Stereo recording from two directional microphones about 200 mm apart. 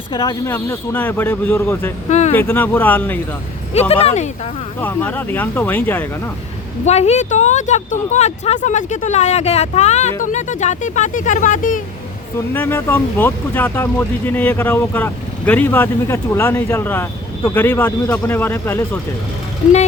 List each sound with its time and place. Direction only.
0.1 s speech: 20° left (ahead or behind)
2.0 s speech: 35° left (ahead or behind)
2.3 s speech: 10° left (ahead or behind)
3.8 s speech: 30° left (ahead or behind)
4.8 s speech: 10° left (ahead or behind)
6.8 s speech: 35° left (ahead or behind)
12.5 s speech: 10° left (ahead or behind)